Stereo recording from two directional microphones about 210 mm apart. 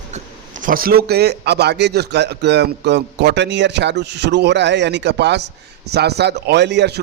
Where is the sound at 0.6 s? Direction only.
45° right (ahead or behind).